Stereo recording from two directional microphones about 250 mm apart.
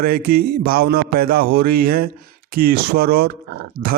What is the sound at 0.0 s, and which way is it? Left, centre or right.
Speech, right.